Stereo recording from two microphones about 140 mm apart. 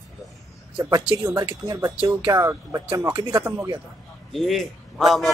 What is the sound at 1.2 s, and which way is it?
Speech, 15° right (ahead or behind).